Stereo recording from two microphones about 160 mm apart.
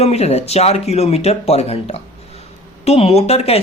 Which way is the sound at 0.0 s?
40° left (ahead or behind).